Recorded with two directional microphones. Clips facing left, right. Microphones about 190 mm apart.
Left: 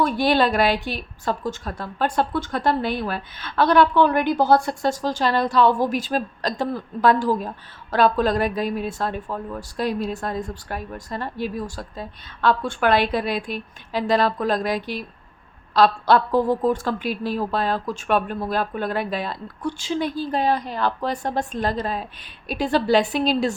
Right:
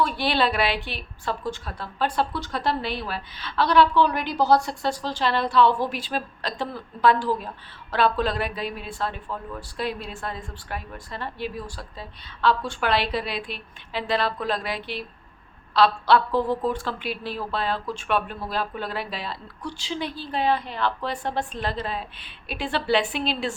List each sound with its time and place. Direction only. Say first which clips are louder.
0.0 s a woman's voice: left 4 dB; 45° left (ahead or behind)